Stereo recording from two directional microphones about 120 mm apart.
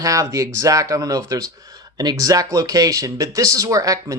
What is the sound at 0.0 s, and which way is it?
Speech, 25° right (ahead or behind).